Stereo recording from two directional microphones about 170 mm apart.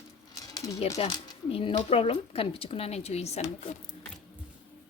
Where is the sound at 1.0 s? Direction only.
30° left (ahead or behind).